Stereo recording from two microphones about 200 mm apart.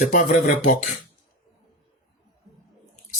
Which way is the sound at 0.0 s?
40° left (ahead or behind).